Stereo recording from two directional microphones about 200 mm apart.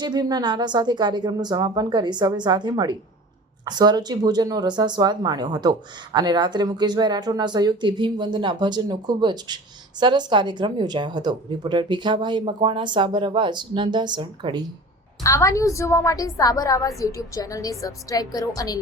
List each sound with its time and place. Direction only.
0.0 s a woman's voice: 20° right (ahead or behind)
15.2 s a woman's voice: 15° left (ahead or behind)